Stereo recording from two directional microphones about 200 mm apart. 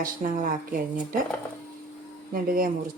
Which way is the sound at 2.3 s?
45° right (ahead or behind).